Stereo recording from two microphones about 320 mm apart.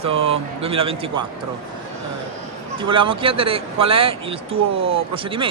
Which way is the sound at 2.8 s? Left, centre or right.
Centre.